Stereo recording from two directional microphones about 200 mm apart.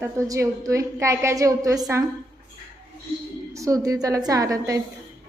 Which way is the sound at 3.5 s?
15° right (ahead or behind).